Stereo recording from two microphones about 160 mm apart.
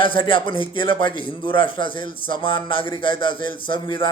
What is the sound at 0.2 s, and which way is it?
Mantra, 30° left (ahead or behind).